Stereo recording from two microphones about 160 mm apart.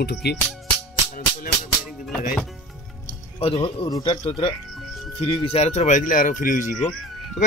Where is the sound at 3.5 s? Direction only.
35° left (ahead or behind).